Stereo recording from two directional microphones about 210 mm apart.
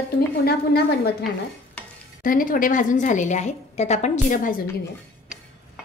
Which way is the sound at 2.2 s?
40° left (ahead or behind).